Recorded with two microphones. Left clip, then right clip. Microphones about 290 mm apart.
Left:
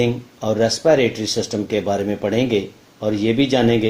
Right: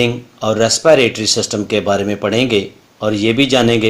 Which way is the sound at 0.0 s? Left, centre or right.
Right.